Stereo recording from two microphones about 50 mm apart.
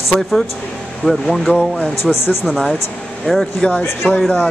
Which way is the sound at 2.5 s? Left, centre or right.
Centre.